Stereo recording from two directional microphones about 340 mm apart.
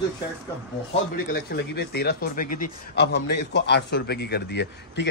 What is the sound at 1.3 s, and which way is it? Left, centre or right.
A man's voice, left.